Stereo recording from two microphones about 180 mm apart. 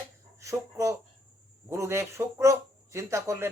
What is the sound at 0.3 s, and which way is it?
Speech, 15° right (ahead or behind).